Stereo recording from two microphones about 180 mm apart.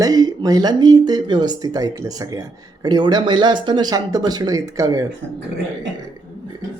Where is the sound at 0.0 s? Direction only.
20° right (ahead or behind).